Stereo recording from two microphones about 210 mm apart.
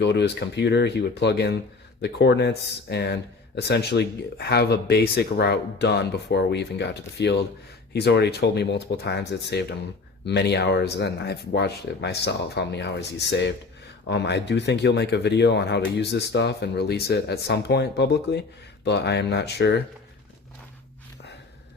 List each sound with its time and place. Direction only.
0.0 s speech: 55° left (ahead or behind)